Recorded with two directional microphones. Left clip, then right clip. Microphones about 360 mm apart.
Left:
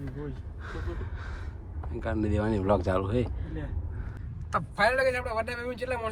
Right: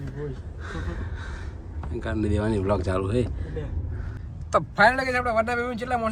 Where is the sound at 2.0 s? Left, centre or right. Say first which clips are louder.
Right 3 dB; centre.